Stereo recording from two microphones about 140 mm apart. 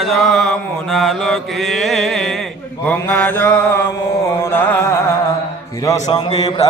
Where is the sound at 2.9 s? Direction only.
10° left (ahead or behind).